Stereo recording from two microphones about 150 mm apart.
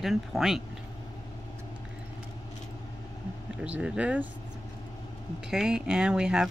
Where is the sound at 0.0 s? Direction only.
Centre (ahead or behind).